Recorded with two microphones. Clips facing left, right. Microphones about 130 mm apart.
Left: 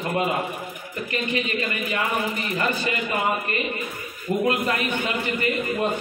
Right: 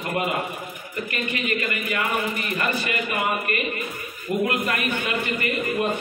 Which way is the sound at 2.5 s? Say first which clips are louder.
Left 1 dB; 20° left (ahead or behind).